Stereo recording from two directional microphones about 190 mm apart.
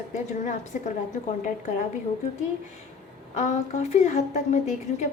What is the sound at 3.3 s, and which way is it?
Speech, 35° left (ahead or behind).